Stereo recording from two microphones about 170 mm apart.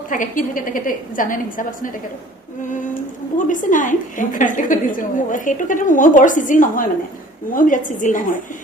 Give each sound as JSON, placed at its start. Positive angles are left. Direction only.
{"t": 0.1, "sound": "a woman's voice", "side_deg": 50}
{"t": 3.3, "sound": "a woman's voice", "side_deg": 50}